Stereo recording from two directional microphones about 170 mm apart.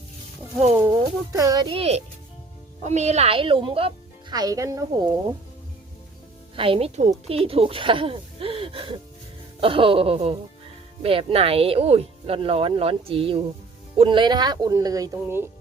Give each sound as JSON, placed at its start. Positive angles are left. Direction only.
{"t": 0.8, "sound": "speech", "side_deg": -20}
{"t": 6.6, "sound": "speech", "side_deg": -35}